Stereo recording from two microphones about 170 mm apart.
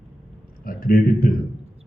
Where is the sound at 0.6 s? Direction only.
60° left (ahead or behind).